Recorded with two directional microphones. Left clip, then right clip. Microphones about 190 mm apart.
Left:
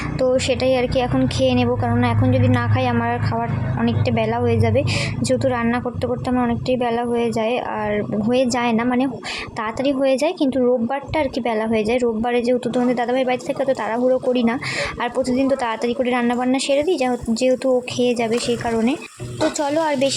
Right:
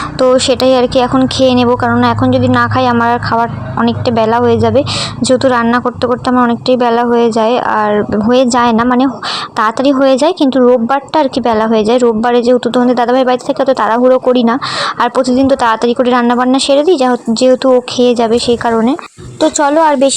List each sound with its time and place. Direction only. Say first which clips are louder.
0.2 s a woman's voice: right 9 dB; 20° right (ahead or behind)